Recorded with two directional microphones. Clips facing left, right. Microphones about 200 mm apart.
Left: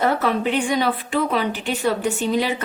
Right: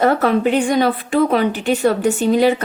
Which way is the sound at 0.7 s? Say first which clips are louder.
Right 5 dB; 45° right (ahead or behind).